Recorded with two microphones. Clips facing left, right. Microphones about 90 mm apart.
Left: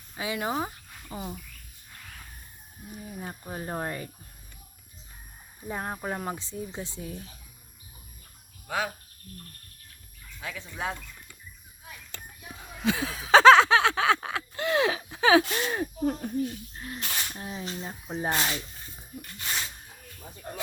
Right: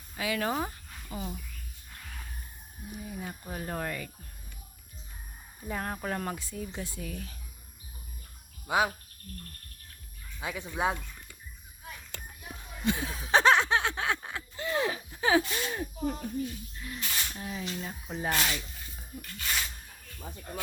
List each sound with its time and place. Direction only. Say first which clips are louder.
0.2 s speech: even; 20° left (ahead or behind)
0.5 s snake: left 2 dB; 15° left (ahead or behind)
3.5 s speech: left 2 dB; 25° left (ahead or behind)
5.6 s speech: left 1 dB; 20° left (ahead or behind)
8.6 s speech: right 4 dB; 15° right (ahead or behind)
10.4 s speech: right 4 dB; 15° right (ahead or behind)
12.9 s a sound: left 6 dB; 90° left; by 17.2 s 45° left (ahead or behind)
17.3 s speech: left 1 dB; 30° left (ahead or behind)
18.9 s a sound: left 1 dB; 20° left (ahead or behind)